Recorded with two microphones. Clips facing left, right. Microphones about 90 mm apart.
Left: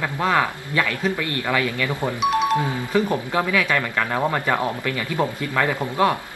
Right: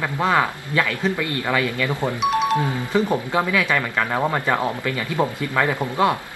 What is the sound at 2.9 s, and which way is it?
Speech, 20° right (ahead or behind).